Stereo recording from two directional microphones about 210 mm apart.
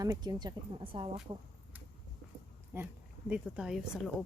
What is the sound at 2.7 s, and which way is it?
A woman's voice, 10° right (ahead or behind).